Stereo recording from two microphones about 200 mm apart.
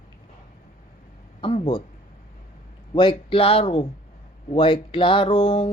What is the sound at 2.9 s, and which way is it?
Speech, 25° left (ahead or behind).